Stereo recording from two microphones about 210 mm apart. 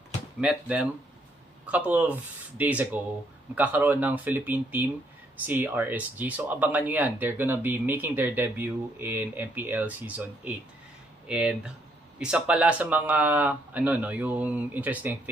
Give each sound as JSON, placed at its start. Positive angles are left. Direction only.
{"t": 0.4, "sound": "speech", "side_deg": -5}